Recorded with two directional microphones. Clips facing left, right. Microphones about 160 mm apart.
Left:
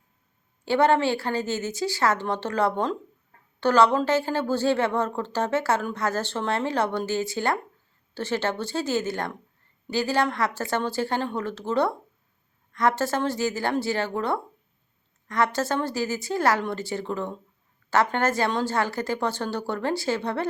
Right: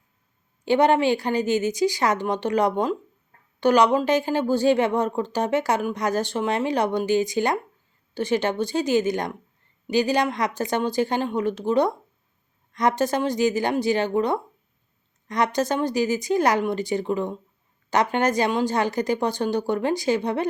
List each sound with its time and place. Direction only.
0.6 s speech: 15° right (ahead or behind)